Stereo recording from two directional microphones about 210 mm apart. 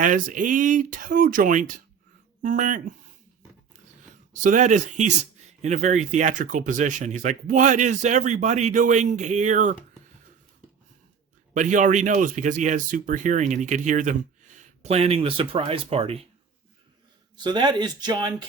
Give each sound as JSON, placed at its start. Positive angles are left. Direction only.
{"t": 0.0, "sound": "a man's voice", "side_deg": -40}
{"t": 4.4, "sound": "a man's voice", "side_deg": -35}
{"t": 11.5, "sound": "a man's voice", "side_deg": -35}
{"t": 17.3, "sound": "speech", "side_deg": -20}